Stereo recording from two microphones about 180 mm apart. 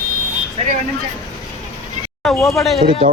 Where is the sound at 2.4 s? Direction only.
15° left (ahead or behind).